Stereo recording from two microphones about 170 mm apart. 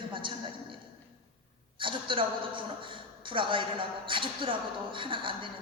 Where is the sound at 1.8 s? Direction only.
30° right (ahead or behind).